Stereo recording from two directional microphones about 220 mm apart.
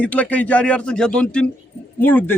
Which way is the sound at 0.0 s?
5° left (ahead or behind).